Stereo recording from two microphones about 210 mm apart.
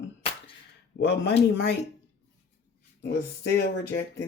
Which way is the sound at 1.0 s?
55° left (ahead or behind).